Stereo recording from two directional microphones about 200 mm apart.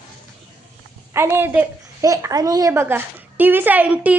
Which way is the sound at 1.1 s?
10° right (ahead or behind).